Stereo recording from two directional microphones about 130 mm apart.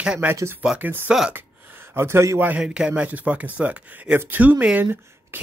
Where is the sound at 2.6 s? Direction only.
5° right (ahead or behind).